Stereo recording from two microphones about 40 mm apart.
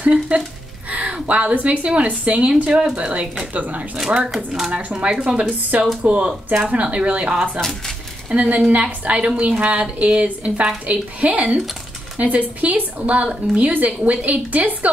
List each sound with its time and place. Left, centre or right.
0.0 s a woman's voice: right
3.5 s a woman's voice: right
4.9 s speech: centre
5.7 s a woman's voice: right